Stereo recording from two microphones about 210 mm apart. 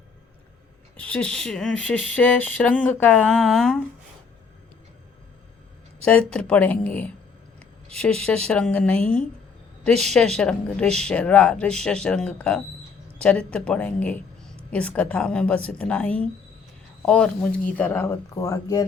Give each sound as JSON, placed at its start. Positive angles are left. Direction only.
{"t": 0.9, "sound": "speech", "side_deg": 5}
{"t": 6.1, "sound": "speech", "side_deg": 5}